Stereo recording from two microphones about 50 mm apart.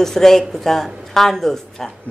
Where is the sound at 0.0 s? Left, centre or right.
Centre.